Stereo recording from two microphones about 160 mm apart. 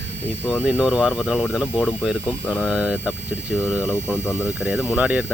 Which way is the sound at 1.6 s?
10° left (ahead or behind).